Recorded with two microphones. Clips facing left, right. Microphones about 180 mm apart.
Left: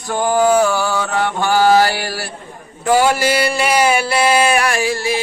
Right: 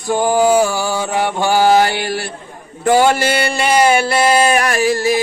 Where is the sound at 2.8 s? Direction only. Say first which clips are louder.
Right 2 dB; 50° right (ahead or behind).